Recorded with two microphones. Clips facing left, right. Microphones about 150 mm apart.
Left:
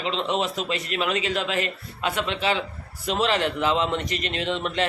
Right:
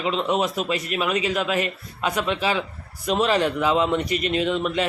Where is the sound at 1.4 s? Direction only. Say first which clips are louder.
Right 3 dB; 25° left (ahead or behind).